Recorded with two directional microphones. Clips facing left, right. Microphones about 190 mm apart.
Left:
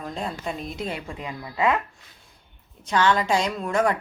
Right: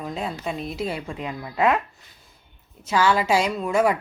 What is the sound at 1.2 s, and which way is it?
Speech, 20° right (ahead or behind).